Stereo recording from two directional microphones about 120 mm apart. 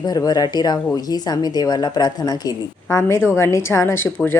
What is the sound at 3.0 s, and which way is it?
A woman's voice, 20° left (ahead or behind).